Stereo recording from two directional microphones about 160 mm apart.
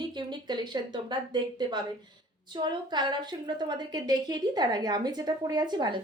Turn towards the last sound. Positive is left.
turn(degrees=-25)  # may be behind; listen again after turning